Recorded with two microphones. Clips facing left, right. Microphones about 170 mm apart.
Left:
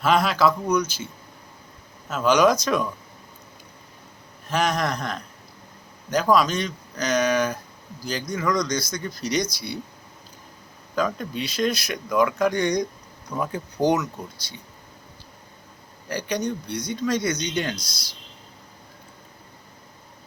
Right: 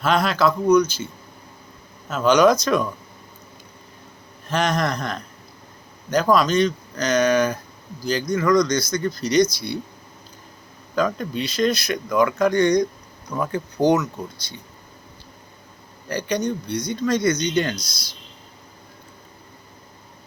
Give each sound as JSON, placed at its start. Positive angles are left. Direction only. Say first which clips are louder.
{"t": 0.0, "sound": "speech", "louder": "even", "side_deg": 5}
{"t": 2.0, "sound": "speech", "louder": "right 3 dB", "side_deg": 5}
{"t": 4.4, "sound": "speech", "louder": "right 2 dB", "side_deg": 5}
{"t": 10.9, "sound": "speech", "louder": "right 3 dB", "side_deg": 5}
{"t": 16.0, "sound": "speech", "louder": "right 3 dB", "side_deg": 5}
{"t": 17.8, "sound": "speech", "louder": "right 1 dB", "side_deg": 30}